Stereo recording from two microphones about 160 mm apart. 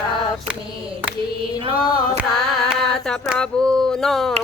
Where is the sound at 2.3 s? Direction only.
Centre (ahead or behind).